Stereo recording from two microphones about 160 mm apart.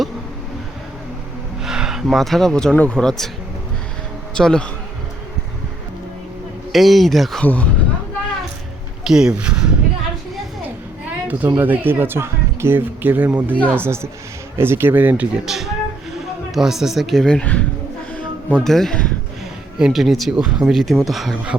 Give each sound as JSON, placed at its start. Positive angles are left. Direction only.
{"t": 1.6, "sound": "speech", "side_deg": -5}
{"t": 4.4, "sound": "speech", "side_deg": 5}
{"t": 6.7, "sound": "speech", "side_deg": 0}
{"t": 9.0, "sound": "speech", "side_deg": -5}
{"t": 11.0, "sound": "speech", "side_deg": -15}